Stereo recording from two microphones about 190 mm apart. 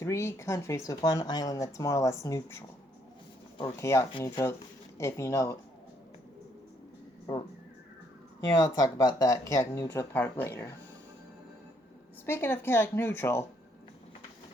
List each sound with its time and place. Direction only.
0.0 s speech: 15° left (ahead or behind)
8.5 s speech: 20° left (ahead or behind)
12.2 s speech: 10° left (ahead or behind)